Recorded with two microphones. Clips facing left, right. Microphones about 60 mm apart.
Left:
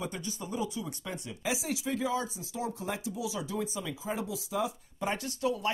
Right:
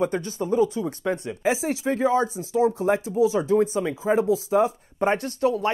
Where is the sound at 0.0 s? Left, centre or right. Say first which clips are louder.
Right 12 dB; right.